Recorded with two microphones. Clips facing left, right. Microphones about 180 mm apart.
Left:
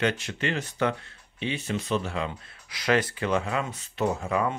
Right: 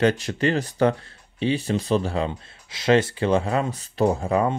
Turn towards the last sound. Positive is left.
turn(degrees=-35)  # may be behind; listen again after turning